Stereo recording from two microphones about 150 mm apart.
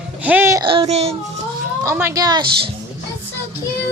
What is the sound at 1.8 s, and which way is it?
Speech, 20° right (ahead or behind).